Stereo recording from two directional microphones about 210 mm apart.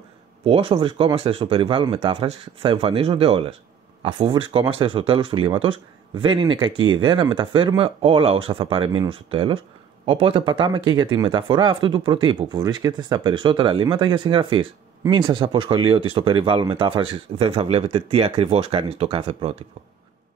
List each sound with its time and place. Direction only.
0.5 s speech: 25° right (ahead or behind)